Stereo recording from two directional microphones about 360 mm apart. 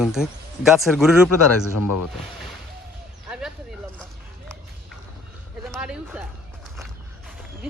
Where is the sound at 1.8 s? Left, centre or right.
Left.